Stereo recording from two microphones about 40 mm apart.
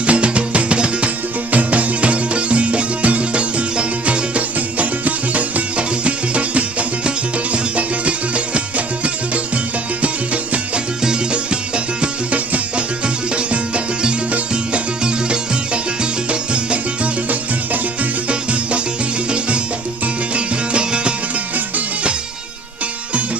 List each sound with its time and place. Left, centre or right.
0.0 s music: right
1.5 s music: right
11.7 s music: right
20.3 s music: right